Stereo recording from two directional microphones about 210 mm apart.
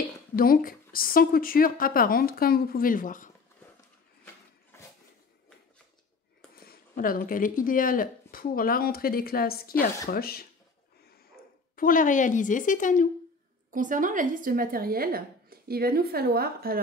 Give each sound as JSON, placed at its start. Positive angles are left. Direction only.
{"t": 0.4, "sound": "speech", "side_deg": 45}
{"t": 6.6, "sound": "speech", "side_deg": 45}
{"t": 13.7, "sound": "a woman's voice", "side_deg": -40}